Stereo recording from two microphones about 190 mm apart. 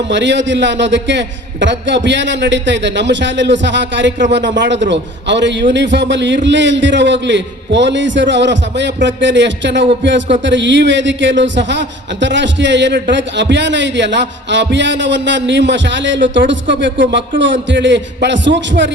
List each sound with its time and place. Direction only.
0.1 s a man's voice: 70° right (ahead or behind)